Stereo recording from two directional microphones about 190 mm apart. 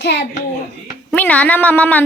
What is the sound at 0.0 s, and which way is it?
Speech, 60° left (ahead or behind).